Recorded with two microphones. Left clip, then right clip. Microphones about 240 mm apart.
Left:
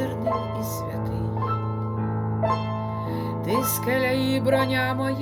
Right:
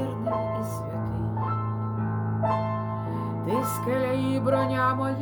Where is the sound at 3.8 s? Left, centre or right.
Centre.